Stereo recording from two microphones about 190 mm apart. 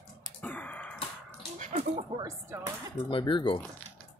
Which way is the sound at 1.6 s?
40° right (ahead or behind).